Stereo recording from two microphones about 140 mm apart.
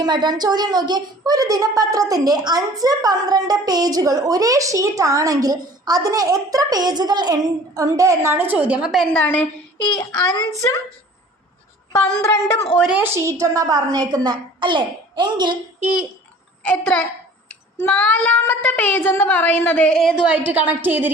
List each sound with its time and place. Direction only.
0.0 s a woman's voice: 30° right (ahead or behind); by 9.0 s 5° right (ahead or behind)
9.1 s a woman's voice: 10° left (ahead or behind)
10.2 s a woman's voice: 25° left (ahead or behind)
12.2 s a woman's voice: 20° left (ahead or behind)
13.0 s a woman's voice: 20° right (ahead or behind)
16.6 s a woman's voice: 10° left (ahead or behind)
20.2 s a woman's voice: 10° right (ahead or behind)